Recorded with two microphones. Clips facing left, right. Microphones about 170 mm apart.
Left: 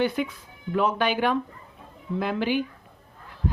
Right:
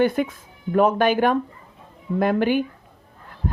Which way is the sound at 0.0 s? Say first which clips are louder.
Right 5 dB; 50° right (ahead or behind).